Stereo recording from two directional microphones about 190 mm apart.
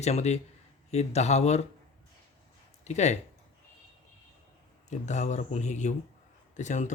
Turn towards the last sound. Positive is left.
turn(degrees=40)  # may be behind; listen again after turning